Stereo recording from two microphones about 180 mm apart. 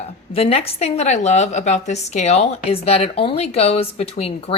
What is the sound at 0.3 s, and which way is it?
A woman's voice, 35° left (ahead or behind).